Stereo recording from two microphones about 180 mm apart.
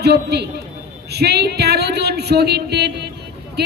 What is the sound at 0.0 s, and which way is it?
A man's voice, 65° right (ahead or behind).